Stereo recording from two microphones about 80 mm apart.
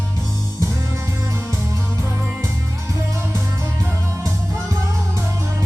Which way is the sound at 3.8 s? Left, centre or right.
Right.